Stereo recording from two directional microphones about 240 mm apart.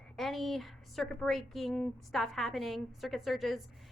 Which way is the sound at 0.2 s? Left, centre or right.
Centre.